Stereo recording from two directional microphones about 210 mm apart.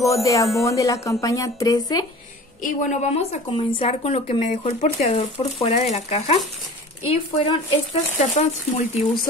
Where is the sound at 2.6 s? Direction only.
35° left (ahead or behind).